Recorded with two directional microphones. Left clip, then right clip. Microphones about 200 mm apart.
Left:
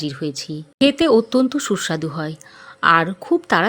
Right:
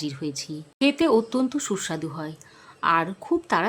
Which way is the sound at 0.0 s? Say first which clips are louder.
Left 5 dB; 15° left (ahead or behind).